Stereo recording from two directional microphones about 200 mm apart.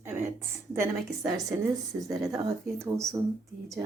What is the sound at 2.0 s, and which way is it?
Speech, 15° right (ahead or behind).